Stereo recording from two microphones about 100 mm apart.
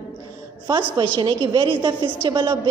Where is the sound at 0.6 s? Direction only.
45° right (ahead or behind).